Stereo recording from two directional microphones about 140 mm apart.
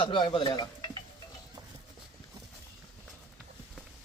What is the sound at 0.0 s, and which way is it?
Speech, 35° left (ahead or behind).